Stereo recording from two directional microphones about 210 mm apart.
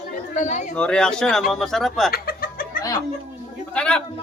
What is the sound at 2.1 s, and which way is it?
Chicken, 45° left (ahead or behind).